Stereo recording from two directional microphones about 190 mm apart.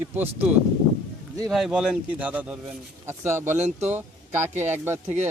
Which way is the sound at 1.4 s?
Centre (ahead or behind).